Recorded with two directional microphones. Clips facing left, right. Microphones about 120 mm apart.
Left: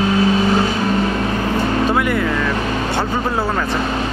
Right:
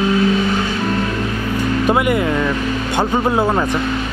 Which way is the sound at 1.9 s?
15° right (ahead or behind).